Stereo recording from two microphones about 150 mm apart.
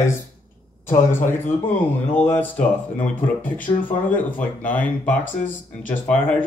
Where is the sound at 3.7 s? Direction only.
25° left (ahead or behind).